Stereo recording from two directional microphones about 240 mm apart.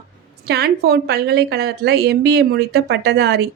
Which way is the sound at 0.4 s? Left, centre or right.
Right.